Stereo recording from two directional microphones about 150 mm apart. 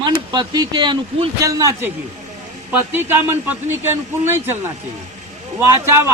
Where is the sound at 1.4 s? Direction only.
20° right (ahead or behind).